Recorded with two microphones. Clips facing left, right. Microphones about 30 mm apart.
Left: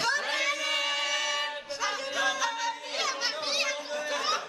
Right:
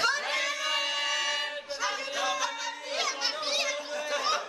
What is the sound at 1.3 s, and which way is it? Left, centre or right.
Choir, centre.